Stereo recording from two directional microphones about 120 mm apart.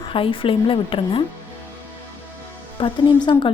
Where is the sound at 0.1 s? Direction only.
45° left (ahead or behind).